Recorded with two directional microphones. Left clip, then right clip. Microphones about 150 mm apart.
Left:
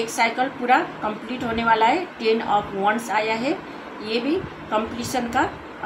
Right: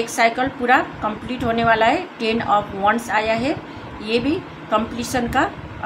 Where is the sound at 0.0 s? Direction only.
45° right (ahead or behind).